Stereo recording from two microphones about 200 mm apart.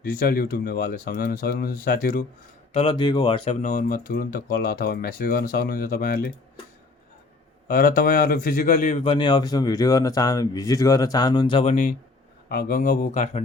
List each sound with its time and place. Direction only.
0.0 s speech: 45° left (ahead or behind)
2.7 s speech: 25° left (ahead or behind); by 6.3 s 50° left (ahead or behind)
7.7 s speech: 45° left (ahead or behind)
12.5 s speech: 50° left (ahead or behind)